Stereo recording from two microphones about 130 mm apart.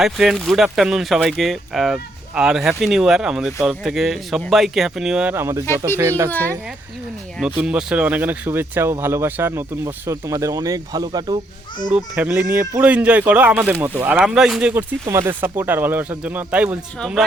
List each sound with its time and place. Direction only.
0.0 s speech: centre (ahead or behind); by 5.6 s 20° right (ahead or behind)
5.6 s speech: 20° left (ahead or behind)
6.0 s speech: 20° right (ahead or behind)
6.3 s speech: 15° left (ahead or behind)
7.3 s speech: 10° right (ahead or behind); by 11.3 s 30° right (ahead or behind)
11.9 s speech: 15° right (ahead or behind)